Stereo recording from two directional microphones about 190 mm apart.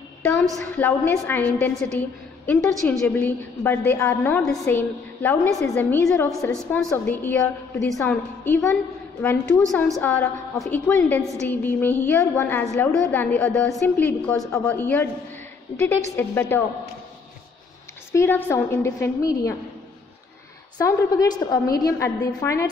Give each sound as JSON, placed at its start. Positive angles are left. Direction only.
{"t": 0.2, "sound": "a woman's voice", "side_deg": 5}
{"t": 6.5, "sound": "a woman's voice", "side_deg": 5}
{"t": 18.1, "sound": "a woman's voice", "side_deg": 10}
{"t": 20.7, "sound": "a woman's voice", "side_deg": 15}